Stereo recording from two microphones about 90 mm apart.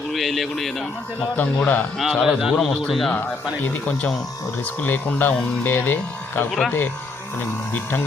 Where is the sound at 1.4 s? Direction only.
15° left (ahead or behind).